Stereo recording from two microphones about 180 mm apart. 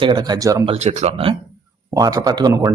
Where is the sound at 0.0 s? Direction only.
25° right (ahead or behind).